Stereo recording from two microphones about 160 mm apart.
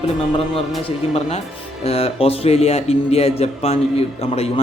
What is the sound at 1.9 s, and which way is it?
Speech, 40° left (ahead or behind).